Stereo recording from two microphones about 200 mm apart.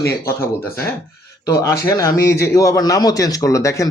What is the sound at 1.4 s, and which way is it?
Speech, 15° left (ahead or behind).